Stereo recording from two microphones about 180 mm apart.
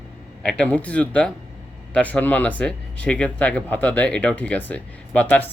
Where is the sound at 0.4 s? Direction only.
5° left (ahead or behind).